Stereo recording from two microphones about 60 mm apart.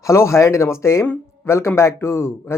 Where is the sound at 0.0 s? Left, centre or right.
Left.